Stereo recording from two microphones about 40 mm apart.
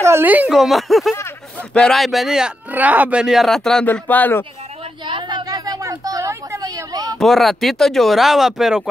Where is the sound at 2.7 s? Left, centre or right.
Right.